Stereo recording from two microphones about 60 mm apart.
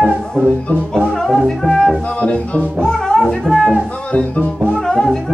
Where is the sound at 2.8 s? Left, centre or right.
Centre.